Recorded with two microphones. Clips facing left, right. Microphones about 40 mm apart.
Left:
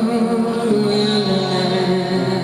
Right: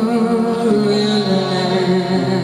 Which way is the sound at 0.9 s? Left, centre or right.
Centre.